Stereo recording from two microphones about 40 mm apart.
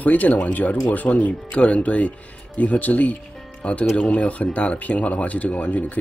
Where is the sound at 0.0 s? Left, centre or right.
Left.